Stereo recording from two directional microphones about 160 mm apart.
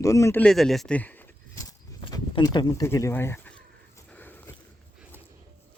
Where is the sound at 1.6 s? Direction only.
25° left (ahead or behind).